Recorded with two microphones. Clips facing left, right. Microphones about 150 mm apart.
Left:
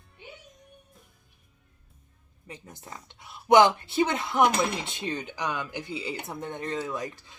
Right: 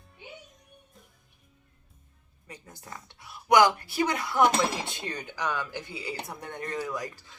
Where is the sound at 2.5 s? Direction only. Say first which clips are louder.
Left 1 dB; 20° left (ahead or behind).